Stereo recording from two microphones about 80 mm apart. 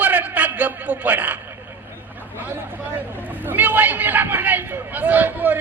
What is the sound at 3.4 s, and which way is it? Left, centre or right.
A man's voice, right.